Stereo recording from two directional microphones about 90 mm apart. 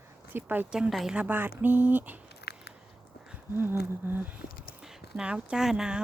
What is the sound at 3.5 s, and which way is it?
Speech, 25° right (ahead or behind).